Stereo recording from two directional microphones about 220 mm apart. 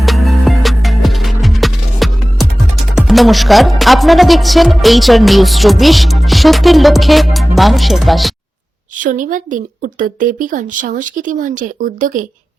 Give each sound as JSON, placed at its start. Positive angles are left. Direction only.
{"t": 0.0, "sound": "music", "side_deg": 0}
{"t": 2.9, "sound": "speech", "side_deg": 0}
{"t": 9.0, "sound": "a woman's voice", "side_deg": -35}